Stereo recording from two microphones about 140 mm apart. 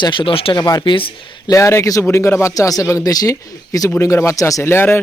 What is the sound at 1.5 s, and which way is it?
Speech, 20° left (ahead or behind).